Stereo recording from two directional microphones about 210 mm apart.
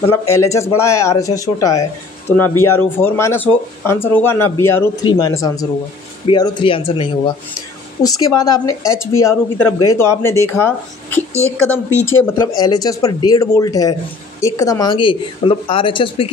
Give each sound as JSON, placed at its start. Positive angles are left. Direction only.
{"t": 0.0, "sound": "speech", "side_deg": 15}
{"t": 8.2, "sound": "speech", "side_deg": 15}